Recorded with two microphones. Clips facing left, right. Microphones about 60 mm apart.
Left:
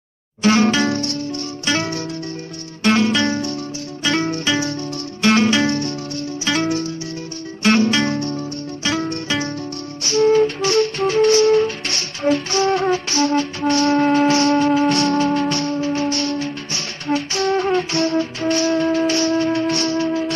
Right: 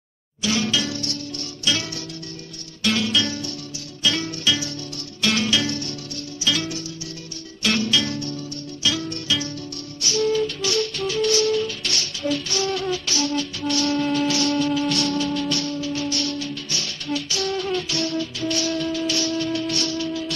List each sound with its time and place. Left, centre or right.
0.4 s music: left
5.6 s music: left
6.4 s music: left
8.1 s music: left
8.8 s music: left
10.0 s flute: left